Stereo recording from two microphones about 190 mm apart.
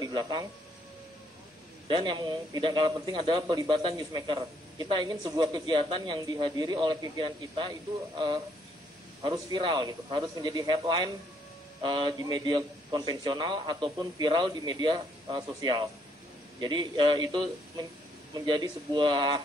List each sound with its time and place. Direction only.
0.0 s speech: 20° right (ahead or behind)
1.9 s a man's voice: 25° right (ahead or behind)
9.2 s a man's voice: 25° right (ahead or behind)